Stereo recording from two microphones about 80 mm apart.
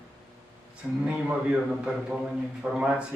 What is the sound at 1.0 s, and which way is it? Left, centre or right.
Speech, centre.